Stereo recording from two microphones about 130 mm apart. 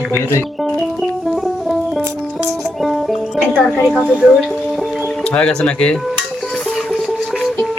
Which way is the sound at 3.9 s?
5° right (ahead or behind).